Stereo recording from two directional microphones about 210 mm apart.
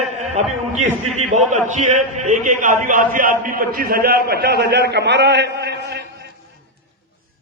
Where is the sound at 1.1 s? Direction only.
35° right (ahead or behind); by 6.3 s 50° right (ahead or behind).